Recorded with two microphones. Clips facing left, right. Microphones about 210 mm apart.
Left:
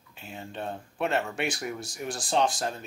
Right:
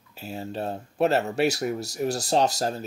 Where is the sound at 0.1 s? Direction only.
40° right (ahead or behind).